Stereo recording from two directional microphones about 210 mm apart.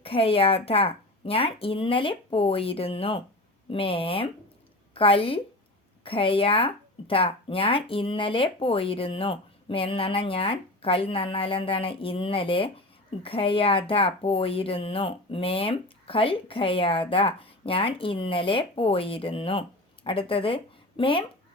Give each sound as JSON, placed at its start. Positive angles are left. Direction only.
{"t": 0.0, "sound": "a woman's voice", "side_deg": 25}